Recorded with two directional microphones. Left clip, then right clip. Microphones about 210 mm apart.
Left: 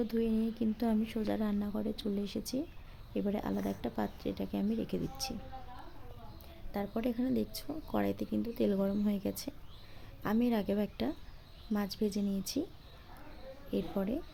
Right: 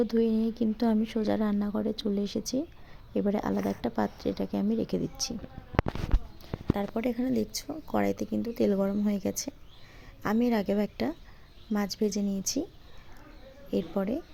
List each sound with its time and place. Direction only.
0.0 s speech: 15° right (ahead or behind)
6.7 s speech: 10° right (ahead or behind)
13.7 s speech: 10° right (ahead or behind)